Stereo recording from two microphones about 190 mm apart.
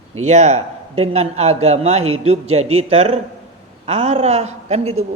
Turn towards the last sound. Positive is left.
turn(degrees=-35)  # may be behind; listen again after turning